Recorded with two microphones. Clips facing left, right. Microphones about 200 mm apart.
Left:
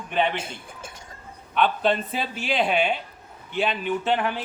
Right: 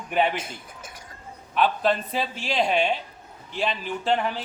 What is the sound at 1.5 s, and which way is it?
Speech, centre (ahead or behind).